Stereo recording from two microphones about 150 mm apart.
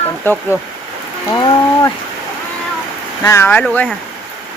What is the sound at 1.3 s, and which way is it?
Speech, 25° left (ahead or behind).